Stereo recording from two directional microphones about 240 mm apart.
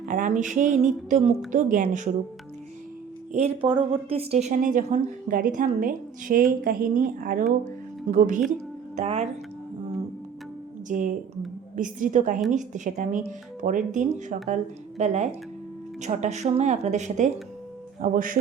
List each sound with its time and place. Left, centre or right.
0.0 s speech: right
3.3 s a woman's voice: right
10.8 s a woman's voice: right